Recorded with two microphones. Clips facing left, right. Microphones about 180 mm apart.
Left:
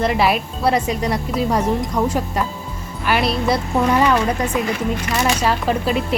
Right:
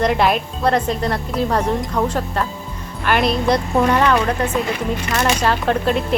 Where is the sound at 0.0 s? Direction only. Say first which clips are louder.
Right 1 dB; 5° left (ahead or behind).